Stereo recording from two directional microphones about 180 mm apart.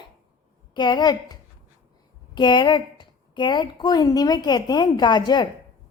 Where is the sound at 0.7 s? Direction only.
25° left (ahead or behind).